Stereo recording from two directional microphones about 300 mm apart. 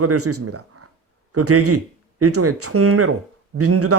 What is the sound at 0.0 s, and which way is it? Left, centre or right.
Speech, right.